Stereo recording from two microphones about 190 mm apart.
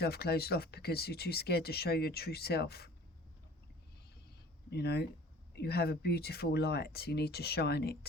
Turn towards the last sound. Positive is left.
turn(degrees=60)  # may be behind; listen again after turning